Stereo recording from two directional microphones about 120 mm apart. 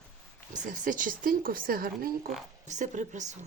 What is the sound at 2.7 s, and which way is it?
Speech, 90° right.